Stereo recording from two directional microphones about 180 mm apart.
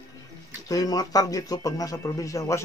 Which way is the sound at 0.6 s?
20° left (ahead or behind).